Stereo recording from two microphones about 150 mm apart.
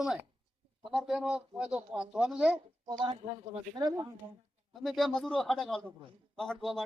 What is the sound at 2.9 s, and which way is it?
Speech, 30° right (ahead or behind).